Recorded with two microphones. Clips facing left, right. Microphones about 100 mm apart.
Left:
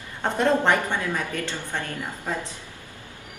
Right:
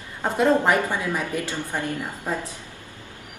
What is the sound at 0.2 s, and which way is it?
A woman's voice, 5° right (ahead or behind).